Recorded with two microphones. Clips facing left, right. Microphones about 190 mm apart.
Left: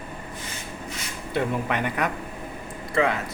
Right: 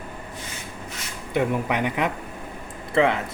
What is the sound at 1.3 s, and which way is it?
Speech, 15° right (ahead or behind).